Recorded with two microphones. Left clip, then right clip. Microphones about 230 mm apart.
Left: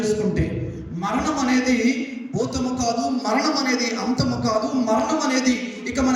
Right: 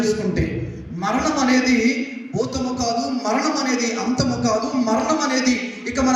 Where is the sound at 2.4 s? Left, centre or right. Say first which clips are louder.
Right 1 dB; right.